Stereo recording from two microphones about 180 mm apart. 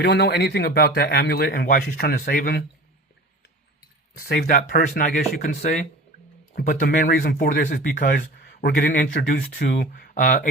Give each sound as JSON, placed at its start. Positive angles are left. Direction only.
{"t": 0.0, "sound": "speech", "side_deg": 70}
{"t": 4.2, "sound": "speech", "side_deg": 55}